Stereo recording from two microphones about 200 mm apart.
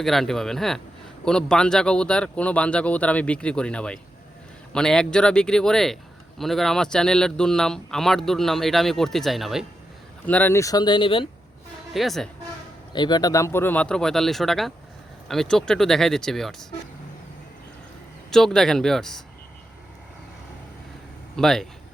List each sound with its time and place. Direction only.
0.0 s a man's voice: centre (ahead or behind); by 11.3 s 25° left (ahead or behind)
11.9 s a man's voice: centre (ahead or behind)
12.9 s a man's voice: 20° left (ahead or behind); by 16.6 s centre (ahead or behind)
18.3 s a man's voice: centre (ahead or behind)
21.3 s a man's voice: centre (ahead or behind)